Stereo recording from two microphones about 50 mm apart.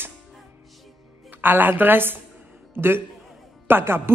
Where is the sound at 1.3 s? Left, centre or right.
Right.